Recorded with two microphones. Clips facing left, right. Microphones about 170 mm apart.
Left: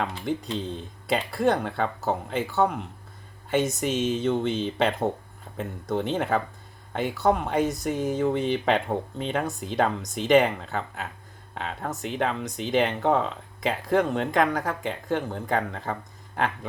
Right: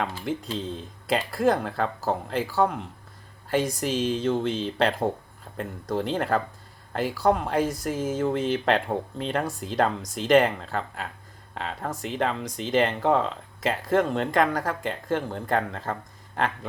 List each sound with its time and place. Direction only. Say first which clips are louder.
0.3 s speech: left 1 dB; centre (ahead or behind)